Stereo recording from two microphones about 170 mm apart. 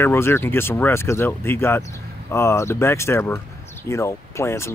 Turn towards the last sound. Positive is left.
turn(degrees=15)  # may be behind; listen again after turning